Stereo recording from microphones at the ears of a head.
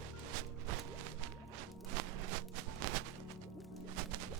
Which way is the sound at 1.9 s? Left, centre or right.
Right.